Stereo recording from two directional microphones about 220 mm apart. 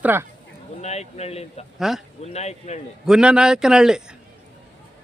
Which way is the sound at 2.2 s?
30° left (ahead or behind).